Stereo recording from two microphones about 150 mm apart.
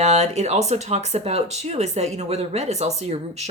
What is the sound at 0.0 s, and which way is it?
Speech, 50° right (ahead or behind).